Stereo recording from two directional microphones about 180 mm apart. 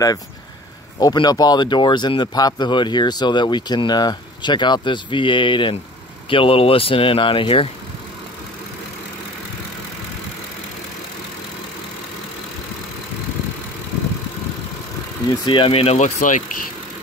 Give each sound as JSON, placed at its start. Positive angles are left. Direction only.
{"t": 0.9, "sound": "speech", "side_deg": 20}
{"t": 15.4, "sound": "speech", "side_deg": 30}